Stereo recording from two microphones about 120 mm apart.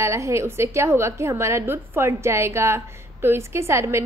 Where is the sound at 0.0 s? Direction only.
25° right (ahead or behind).